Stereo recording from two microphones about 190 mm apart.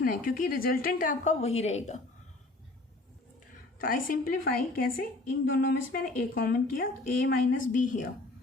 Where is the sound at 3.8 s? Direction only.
50° left (ahead or behind).